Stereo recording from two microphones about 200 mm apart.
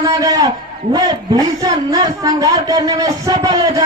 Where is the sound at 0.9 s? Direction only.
20° right (ahead or behind).